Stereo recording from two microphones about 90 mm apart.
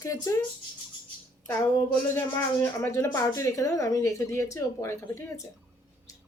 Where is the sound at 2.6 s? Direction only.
25° left (ahead or behind).